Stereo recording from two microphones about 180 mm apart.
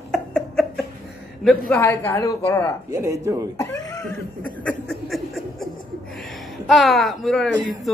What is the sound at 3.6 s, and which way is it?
Cat, 20° left (ahead or behind).